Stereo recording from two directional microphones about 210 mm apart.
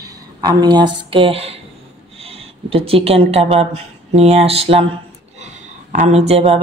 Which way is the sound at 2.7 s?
25° right (ahead or behind).